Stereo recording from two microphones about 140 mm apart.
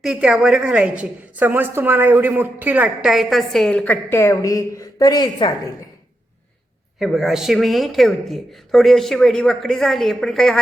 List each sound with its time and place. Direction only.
0.0 s a woman's voice: 5° right (ahead or behind)
4.1 s a woman's voice: 20° left (ahead or behind)
7.0 s speech: centre (ahead or behind)